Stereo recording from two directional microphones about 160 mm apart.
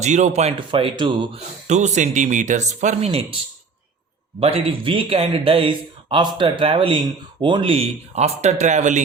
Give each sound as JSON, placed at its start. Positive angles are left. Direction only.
{"t": 0.0, "sound": "speech", "side_deg": -45}
{"t": 0.7, "sound": "speech", "side_deg": -30}
{"t": 1.6, "sound": "speech", "side_deg": -45}
{"t": 4.4, "sound": "speech", "side_deg": -40}